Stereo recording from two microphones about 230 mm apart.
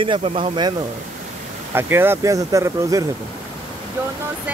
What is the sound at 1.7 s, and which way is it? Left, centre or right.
Speech, centre.